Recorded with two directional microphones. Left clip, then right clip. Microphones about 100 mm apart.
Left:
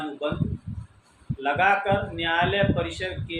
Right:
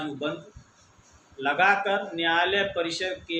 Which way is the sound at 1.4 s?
Centre (ahead or behind).